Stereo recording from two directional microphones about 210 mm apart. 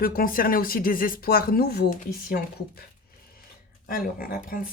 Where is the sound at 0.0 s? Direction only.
45° left (ahead or behind).